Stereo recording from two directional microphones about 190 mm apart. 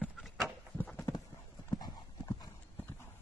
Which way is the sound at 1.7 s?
20° left (ahead or behind).